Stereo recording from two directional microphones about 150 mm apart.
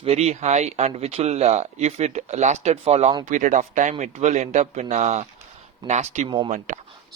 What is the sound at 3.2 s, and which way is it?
Speech, 55° right (ahead or behind).